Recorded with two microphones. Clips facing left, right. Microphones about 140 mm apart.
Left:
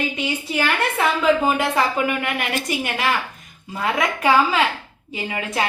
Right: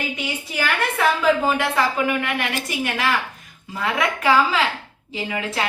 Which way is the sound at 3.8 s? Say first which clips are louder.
Left 1 dB; 25° left (ahead or behind).